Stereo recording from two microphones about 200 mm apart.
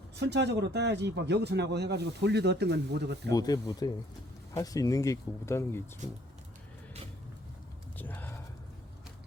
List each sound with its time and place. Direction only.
0.2 s speech: 60° right (ahead or behind)
3.3 s speech: 20° left (ahead or behind)
7.9 s a sound: 10° left (ahead or behind)